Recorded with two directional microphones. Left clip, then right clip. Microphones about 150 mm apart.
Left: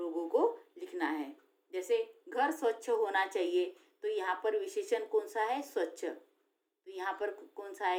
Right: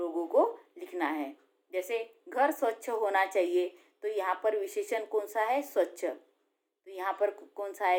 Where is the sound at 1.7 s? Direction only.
40° right (ahead or behind).